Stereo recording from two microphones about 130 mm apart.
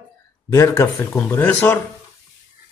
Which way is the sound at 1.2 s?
15° left (ahead or behind).